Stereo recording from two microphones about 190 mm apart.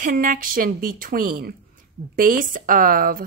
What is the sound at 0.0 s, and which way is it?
Speech, 45° right (ahead or behind).